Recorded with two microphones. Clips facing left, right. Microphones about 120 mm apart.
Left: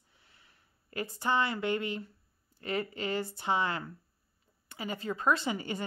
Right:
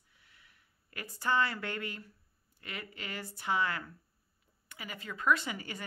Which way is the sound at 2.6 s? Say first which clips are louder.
Left 11 dB; 35° left (ahead or behind).